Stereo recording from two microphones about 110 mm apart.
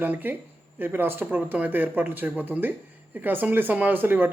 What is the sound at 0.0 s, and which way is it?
Speech, 15° right (ahead or behind).